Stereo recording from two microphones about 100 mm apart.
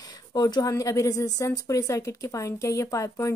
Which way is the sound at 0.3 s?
40° left (ahead or behind).